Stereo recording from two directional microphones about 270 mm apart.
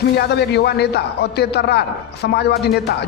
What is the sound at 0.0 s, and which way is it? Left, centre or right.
A man's voice, left.